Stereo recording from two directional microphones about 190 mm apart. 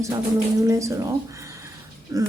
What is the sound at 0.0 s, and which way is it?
Speech, 15° right (ahead or behind).